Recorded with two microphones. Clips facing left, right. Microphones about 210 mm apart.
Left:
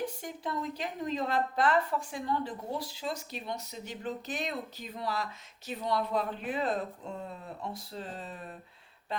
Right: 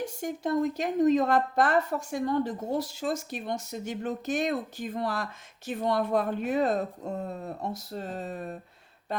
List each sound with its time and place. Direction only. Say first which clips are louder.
0.0 s speech: right 5 dB; 45° right (ahead or behind)